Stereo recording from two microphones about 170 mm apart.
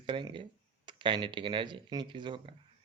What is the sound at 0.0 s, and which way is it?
Speech, 30° right (ahead or behind).